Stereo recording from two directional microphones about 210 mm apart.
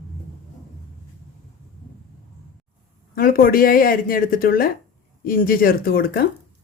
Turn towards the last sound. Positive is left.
turn(degrees=45)  # may be behind; listen again after turning